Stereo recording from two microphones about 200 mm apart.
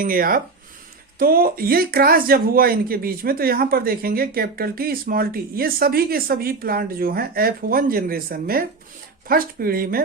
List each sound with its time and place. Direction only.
0.0 s speech: 45° right (ahead or behind)